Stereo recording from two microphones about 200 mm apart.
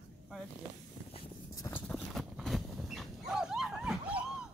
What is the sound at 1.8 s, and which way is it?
Dog, centre (ahead or behind).